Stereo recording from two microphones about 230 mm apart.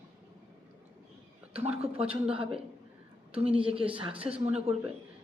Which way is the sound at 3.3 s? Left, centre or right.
Right.